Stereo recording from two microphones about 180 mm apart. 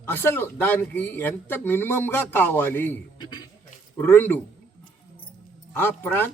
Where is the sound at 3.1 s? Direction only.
25° left (ahead or behind).